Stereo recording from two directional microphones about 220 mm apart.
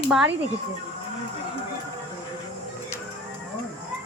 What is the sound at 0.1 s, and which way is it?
Speech, 5° right (ahead or behind).